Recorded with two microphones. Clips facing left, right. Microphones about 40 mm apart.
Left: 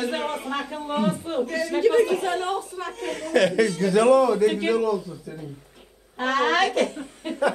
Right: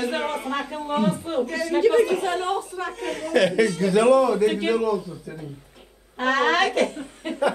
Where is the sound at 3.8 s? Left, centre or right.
Right.